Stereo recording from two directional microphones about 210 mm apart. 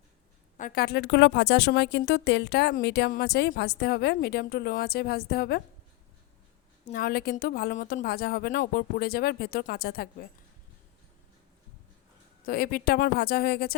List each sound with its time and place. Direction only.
0.5 s speech: 40° left (ahead or behind)
6.9 s speech: 45° left (ahead or behind)
12.5 s speech: 45° left (ahead or behind)